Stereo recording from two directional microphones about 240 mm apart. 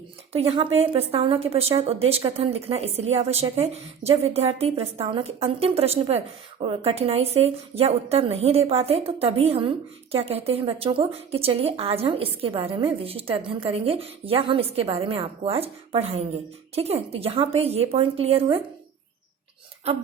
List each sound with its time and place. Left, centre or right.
0.3 s a woman's voice: right